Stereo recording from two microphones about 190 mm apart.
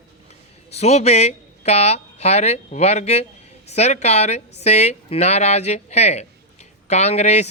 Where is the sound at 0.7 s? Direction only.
35° left (ahead or behind).